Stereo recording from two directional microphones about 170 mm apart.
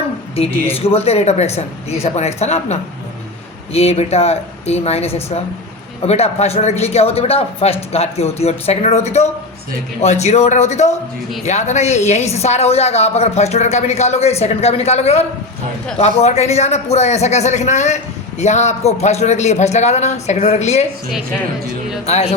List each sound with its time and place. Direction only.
0.8 s speech: 35° left (ahead or behind)
22.0 s speech: 40° left (ahead or behind)